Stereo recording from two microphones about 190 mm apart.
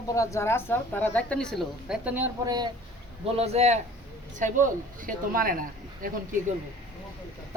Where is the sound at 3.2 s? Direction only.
35° right (ahead or behind); by 6.1 s 50° right (ahead or behind).